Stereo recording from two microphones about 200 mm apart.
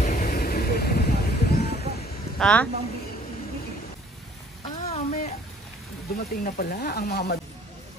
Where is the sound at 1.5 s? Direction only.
50° left (ahead or behind).